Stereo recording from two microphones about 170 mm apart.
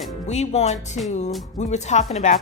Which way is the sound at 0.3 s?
40° left (ahead or behind).